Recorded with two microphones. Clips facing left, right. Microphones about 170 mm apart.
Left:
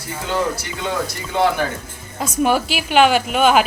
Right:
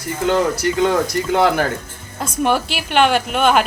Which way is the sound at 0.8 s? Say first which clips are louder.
Right 6 dB; 65° right (ahead or behind).